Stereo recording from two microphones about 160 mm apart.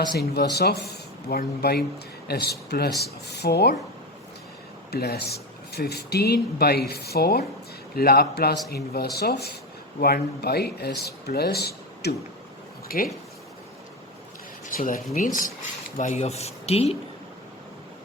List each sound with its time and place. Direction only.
0.2 s speech: 90° left
4.9 s a man's voice: 80° left
12.9 s speech: 65° left (ahead or behind)
14.7 s speech: 60° left (ahead or behind); by 17.0 s 40° left (ahead or behind)